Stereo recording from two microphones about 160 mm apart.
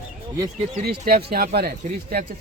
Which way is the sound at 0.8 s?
75° right (ahead or behind).